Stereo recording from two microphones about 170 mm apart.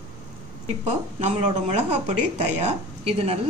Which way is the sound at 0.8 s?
40° right (ahead or behind).